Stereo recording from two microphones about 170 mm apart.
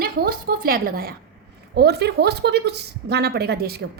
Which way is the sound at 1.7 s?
75° right (ahead or behind).